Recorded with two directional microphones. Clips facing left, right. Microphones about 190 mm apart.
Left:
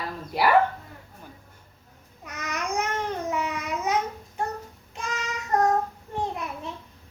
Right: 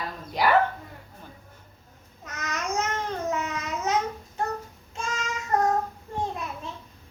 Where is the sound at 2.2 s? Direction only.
10° left (ahead or behind).